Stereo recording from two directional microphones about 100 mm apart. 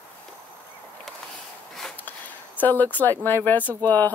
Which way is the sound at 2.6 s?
15° left (ahead or behind).